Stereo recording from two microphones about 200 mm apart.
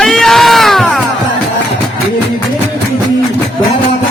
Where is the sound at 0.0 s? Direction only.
Centre (ahead or behind).